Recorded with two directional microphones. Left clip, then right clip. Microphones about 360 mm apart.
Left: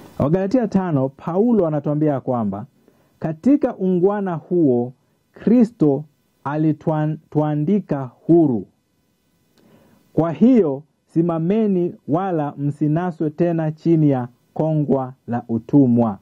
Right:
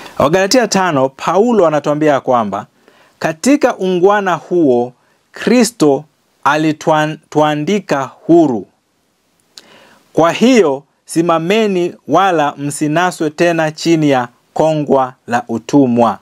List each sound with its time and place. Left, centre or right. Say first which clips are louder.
0.0 s speech: right 9 dB; centre
4.6 s speech: right 5 dB; right
5.3 s speech: right 6 dB; centre
9.6 s a sound: right 14 dB; centre
11.1 s speech: right 8 dB; centre